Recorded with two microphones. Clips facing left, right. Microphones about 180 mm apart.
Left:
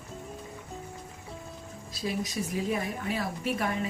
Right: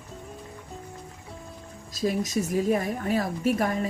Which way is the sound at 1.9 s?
45° right (ahead or behind).